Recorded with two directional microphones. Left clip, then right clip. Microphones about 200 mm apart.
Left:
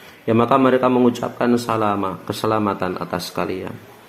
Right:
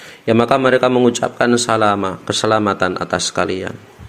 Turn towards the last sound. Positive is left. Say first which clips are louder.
# right 6 dB
turn(degrees=-35)  # may be behind; listen again after turning